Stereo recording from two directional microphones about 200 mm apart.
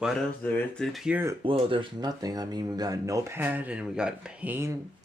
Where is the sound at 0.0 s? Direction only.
5° left (ahead or behind).